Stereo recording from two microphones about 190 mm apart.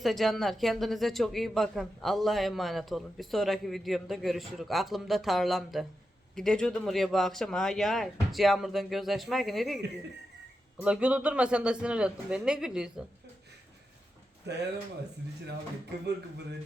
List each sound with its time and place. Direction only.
0.0 s speech: centre (ahead or behind)
14.5 s speech: 60° right (ahead or behind)